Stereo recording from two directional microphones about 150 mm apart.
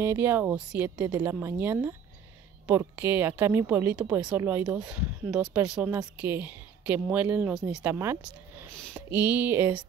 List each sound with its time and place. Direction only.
0.0 s speech: 15° right (ahead or behind)
5.9 s speech: 20° right (ahead or behind)
7.8 s speech: 15° right (ahead or behind)